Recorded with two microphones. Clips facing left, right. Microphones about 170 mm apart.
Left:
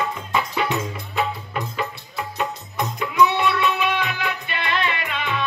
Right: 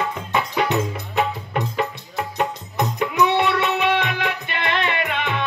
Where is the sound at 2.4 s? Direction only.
55° right (ahead or behind).